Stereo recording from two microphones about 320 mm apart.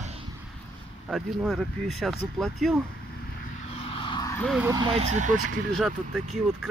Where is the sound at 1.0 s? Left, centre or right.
Centre.